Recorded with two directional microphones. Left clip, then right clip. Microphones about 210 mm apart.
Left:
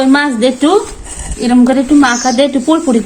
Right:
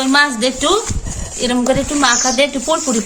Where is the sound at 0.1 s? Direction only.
55° right (ahead or behind).